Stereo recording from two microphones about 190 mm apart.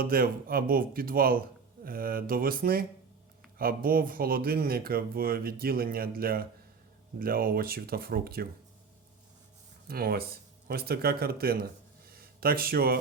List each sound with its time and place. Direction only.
0.0 s speech: 50° right (ahead or behind)
9.8 s speech: 50° right (ahead or behind)